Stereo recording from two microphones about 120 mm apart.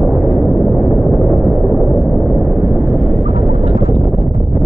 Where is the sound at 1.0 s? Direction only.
15° right (ahead or behind).